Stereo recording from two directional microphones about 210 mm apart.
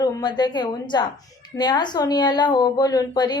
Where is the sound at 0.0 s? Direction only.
20° left (ahead or behind).